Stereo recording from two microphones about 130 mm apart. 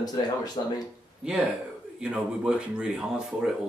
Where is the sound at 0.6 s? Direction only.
40° left (ahead or behind).